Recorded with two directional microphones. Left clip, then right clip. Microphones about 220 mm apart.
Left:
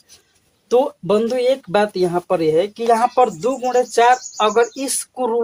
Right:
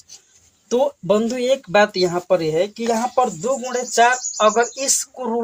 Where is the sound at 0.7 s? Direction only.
45° left (ahead or behind).